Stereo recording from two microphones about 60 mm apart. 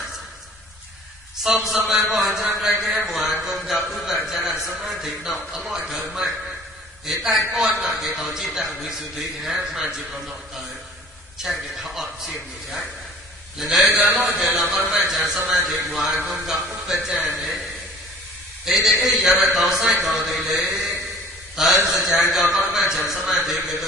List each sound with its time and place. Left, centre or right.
1.5 s a man's voice: centre
18.7 s a man's voice: centre
20.8 s a sound: centre
21.5 s a man's voice: centre